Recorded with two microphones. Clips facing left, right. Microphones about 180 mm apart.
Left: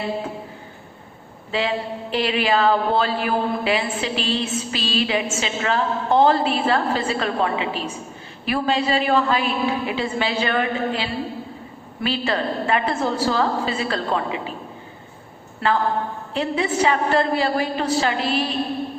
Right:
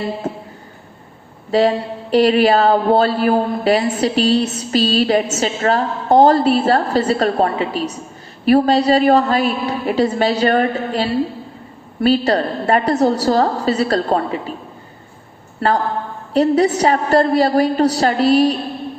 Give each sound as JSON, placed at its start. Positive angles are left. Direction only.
{"t": 0.2, "sound": "a sound", "side_deg": -40}
{"t": 1.5, "sound": "speech", "side_deg": -40}
{"t": 15.6, "sound": "speech", "side_deg": -40}